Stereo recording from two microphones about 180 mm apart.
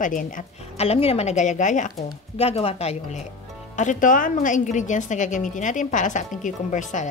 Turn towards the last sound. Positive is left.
turn(degrees=45)  # may be behind; listen again after turning